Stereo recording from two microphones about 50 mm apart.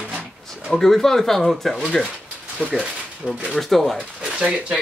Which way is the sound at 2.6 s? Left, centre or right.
Left.